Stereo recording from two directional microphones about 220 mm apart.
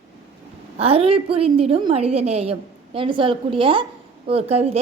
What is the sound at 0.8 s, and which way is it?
A woman's voice, 25° right (ahead or behind).